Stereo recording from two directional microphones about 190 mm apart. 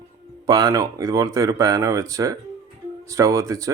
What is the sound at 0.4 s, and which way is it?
Speech, 20° right (ahead or behind).